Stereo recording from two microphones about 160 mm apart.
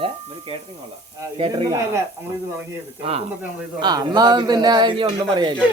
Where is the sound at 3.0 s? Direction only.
40° right (ahead or behind).